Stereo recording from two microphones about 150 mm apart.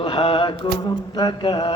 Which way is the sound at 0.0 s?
35° left (ahead or behind).